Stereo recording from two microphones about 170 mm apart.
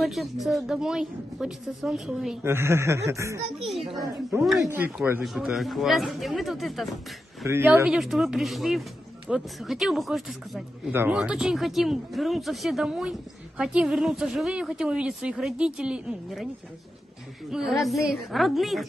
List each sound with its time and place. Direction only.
0.0 s a woman's voice: centre (ahead or behind)
2.4 s speech: 15° right (ahead or behind)
4.6 s speech: 15° right (ahead or behind)
5.2 s a woman's voice: centre (ahead or behind)
7.4 s speech: 15° right (ahead or behind)
7.8 s a woman's voice: centre (ahead or behind)
10.9 s a woman's voice: 10° right (ahead or behind)
17.5 s a woman's voice: centre (ahead or behind)